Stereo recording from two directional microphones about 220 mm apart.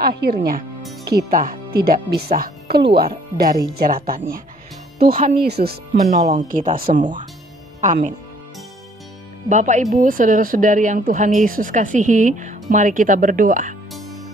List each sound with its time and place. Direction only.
0.0 s speech: 45° right (ahead or behind)
6.0 s speech: 35° right (ahead or behind)
9.5 s speech: 35° right (ahead or behind)